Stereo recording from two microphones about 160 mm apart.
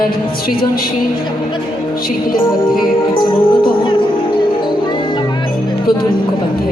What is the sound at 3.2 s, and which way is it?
Music, 30° left (ahead or behind).